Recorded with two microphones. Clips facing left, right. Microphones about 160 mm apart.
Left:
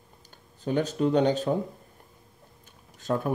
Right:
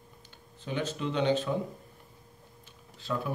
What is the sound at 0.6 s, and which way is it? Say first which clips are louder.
Speech: left 8 dB; 45° left (ahead or behind).